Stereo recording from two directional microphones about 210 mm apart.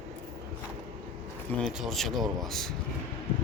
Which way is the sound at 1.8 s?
Centre (ahead or behind).